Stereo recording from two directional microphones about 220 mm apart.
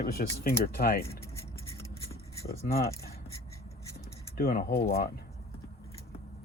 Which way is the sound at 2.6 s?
45° left (ahead or behind).